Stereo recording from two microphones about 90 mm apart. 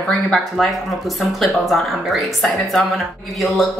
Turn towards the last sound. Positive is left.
turn(degrees=0)  # may be behind; listen again after turning